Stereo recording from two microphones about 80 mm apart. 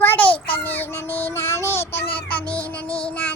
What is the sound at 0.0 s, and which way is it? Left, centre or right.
Child singing, left.